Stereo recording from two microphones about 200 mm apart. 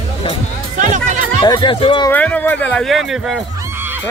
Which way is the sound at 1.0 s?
40° right (ahead or behind).